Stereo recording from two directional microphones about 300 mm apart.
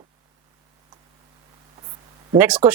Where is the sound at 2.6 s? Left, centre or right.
Centre.